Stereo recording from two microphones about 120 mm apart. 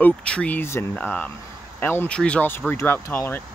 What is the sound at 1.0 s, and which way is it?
Speech, 10° left (ahead or behind).